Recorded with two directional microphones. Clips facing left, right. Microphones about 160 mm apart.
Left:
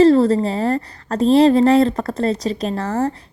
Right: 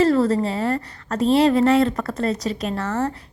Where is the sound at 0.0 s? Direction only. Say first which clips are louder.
Left 5 dB; 35° left (ahead or behind).